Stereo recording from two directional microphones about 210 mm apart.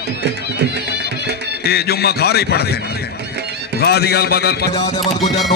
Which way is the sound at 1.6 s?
50° left (ahead or behind).